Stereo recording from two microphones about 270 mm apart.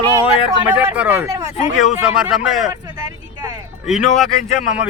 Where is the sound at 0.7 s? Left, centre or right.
Centre.